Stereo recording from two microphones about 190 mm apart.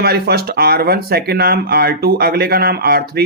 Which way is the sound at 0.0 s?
55° right (ahead or behind).